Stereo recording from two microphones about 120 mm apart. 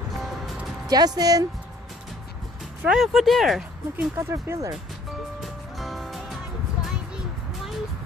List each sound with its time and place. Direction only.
0.8 s speech: 35° right (ahead or behind)
2.8 s speech: 5° right (ahead or behind)
3.9 s speech: 20° right (ahead or behind)
5.4 s music: centre (ahead or behind)
6.8 s a sound: 5° right (ahead or behind)